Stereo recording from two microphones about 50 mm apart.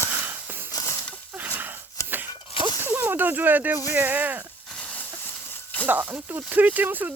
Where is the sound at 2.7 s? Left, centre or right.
Right.